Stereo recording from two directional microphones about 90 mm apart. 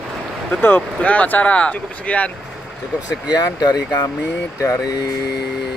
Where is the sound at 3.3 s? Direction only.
45° left (ahead or behind).